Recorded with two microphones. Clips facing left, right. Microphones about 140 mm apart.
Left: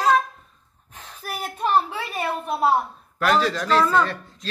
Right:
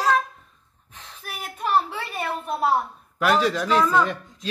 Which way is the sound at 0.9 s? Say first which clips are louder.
Left 5 dB; 45° left (ahead or behind).